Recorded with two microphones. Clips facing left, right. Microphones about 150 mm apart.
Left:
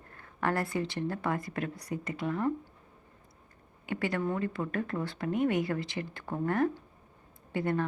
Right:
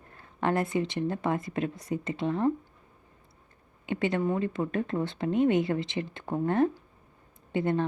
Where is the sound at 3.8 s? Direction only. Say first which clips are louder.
Right 4 dB; 25° right (ahead or behind).